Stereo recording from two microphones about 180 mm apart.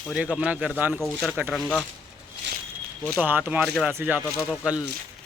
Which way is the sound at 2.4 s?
70° right (ahead or behind).